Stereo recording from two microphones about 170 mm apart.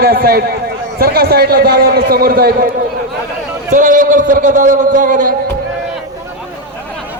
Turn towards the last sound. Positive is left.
turn(degrees=-50)  # may be behind; listen again after turning